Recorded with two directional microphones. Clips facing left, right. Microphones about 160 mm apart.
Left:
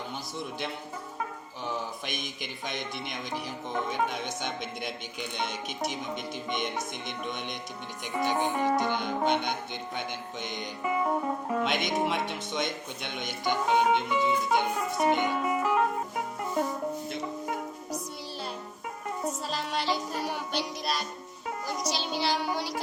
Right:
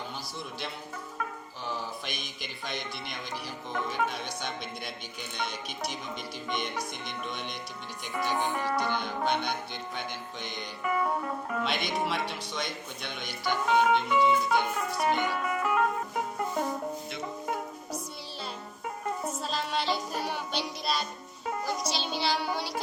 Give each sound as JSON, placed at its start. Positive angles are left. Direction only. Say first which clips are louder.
{"t": 1.6, "sound": "speech", "louder": "left 2 dB", "side_deg": 20}
{"t": 10.4, "sound": "music", "louder": "left 1 dB", "side_deg": 20}
{"t": 11.4, "sound": "speech", "louder": "left 3 dB", "side_deg": 20}
{"t": 19.2, "sound": "music", "louder": "left 1 dB", "side_deg": 10}